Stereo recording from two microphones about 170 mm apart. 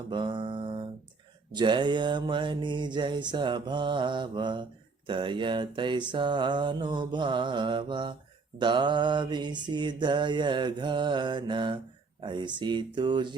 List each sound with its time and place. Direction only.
0.1 s mantra: 30° right (ahead or behind)